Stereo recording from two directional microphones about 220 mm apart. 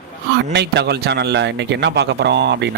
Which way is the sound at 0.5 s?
50° right (ahead or behind).